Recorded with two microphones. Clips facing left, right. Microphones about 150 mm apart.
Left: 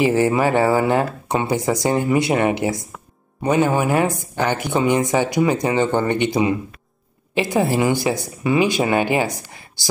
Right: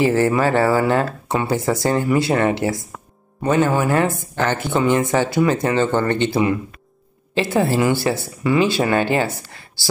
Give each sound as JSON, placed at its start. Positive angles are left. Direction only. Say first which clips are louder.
{"t": 0.0, "sound": "a woman's voice", "louder": "even", "side_deg": 15}